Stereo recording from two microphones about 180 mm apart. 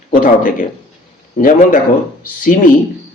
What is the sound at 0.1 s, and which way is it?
Speech, 50° left (ahead or behind).